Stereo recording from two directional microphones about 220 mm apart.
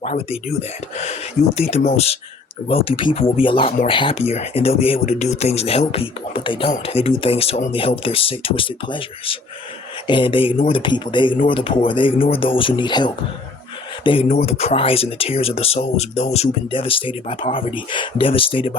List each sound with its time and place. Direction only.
0.0 s speech: 30° left (ahead or behind)